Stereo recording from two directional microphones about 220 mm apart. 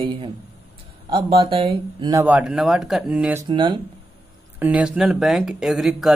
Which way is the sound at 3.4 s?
20° right (ahead or behind).